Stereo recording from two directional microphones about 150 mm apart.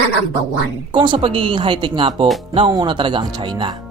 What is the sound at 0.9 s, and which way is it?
A woman's voice, 35° right (ahead or behind).